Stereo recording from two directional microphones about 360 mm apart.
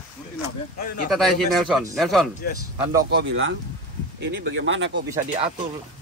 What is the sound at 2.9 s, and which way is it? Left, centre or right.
Speech, right.